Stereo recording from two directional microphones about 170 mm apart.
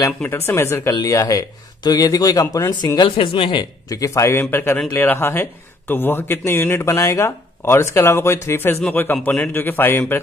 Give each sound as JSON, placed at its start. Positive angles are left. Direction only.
{"t": 0.0, "sound": "a man's voice", "side_deg": 15}